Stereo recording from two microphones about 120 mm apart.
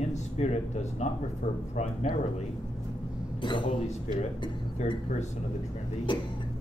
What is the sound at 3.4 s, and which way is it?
Speech, 40° left (ahead or behind).